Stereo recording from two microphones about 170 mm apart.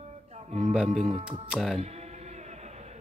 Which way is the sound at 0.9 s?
35° right (ahead or behind).